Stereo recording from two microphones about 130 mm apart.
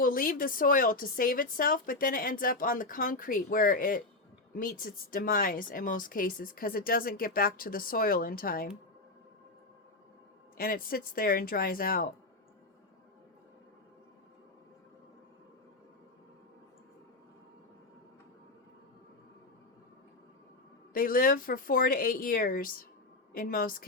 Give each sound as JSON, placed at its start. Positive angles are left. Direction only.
{"t": 0.0, "sound": "a woman's voice", "side_deg": 90}
{"t": 10.7, "sound": "a woman's voice", "side_deg": 90}
{"t": 20.9, "sound": "a woman's voice", "side_deg": 90}